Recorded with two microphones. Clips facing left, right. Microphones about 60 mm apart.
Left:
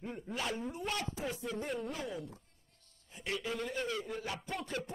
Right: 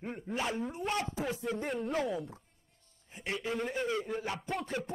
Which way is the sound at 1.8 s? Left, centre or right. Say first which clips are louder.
Right 7 dB; right.